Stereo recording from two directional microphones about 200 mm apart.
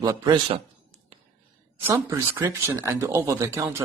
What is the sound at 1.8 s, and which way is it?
Speech, 10° right (ahead or behind).